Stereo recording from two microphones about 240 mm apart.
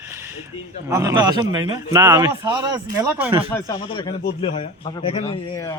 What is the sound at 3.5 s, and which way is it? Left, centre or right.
Speech, centre.